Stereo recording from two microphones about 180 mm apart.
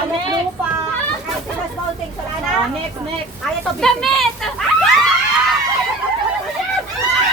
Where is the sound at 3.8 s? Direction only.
Centre (ahead or behind).